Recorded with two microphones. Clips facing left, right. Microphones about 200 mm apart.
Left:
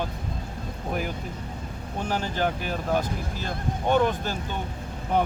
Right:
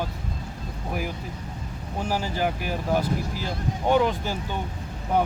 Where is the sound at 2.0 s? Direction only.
10° right (ahead or behind).